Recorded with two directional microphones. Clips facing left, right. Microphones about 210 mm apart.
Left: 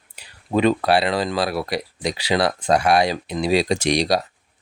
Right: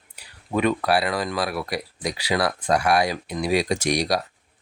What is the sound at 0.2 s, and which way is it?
Speech, 30° left (ahead or behind).